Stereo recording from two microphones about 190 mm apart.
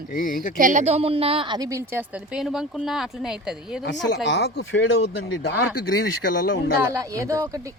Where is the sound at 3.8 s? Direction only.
70° left (ahead or behind).